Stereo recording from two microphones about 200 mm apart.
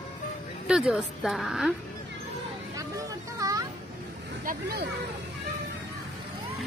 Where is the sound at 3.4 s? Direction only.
15° right (ahead or behind).